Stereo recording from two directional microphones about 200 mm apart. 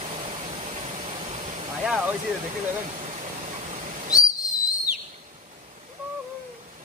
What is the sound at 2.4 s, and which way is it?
Owl, 35° right (ahead or behind).